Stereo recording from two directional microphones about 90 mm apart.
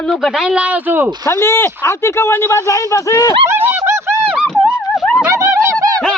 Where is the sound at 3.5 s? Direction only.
20° right (ahead or behind).